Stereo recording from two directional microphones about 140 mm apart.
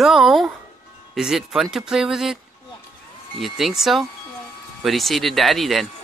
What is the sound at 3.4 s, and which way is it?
Speech, centre (ahead or behind).